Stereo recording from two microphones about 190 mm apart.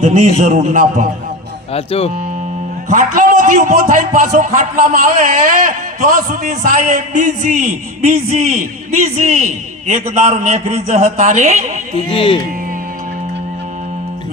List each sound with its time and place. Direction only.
0.0 s a man's voice: 40° right (ahead or behind)
1.7 s speech: 30° left (ahead or behind)
2.9 s a man's voice: 45° right (ahead or behind)
12.1 s speech: 30° left (ahead or behind)